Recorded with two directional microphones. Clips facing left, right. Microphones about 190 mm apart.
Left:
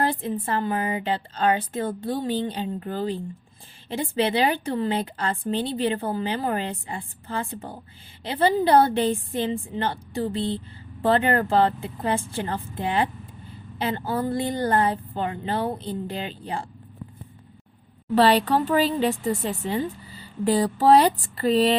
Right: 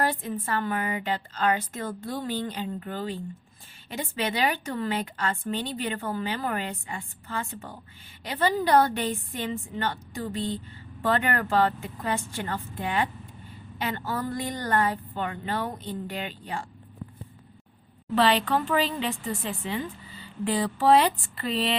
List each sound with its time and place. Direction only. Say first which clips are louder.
0.0 s a woman's voice: left 3 dB; 30° left (ahead or behind)
18.1 s a woman's voice: left 4 dB; 40° left (ahead or behind)